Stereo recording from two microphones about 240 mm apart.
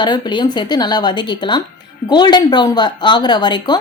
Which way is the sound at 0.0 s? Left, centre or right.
Centre.